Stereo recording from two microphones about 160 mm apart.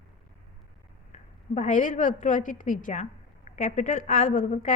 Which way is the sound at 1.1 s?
50° left (ahead or behind).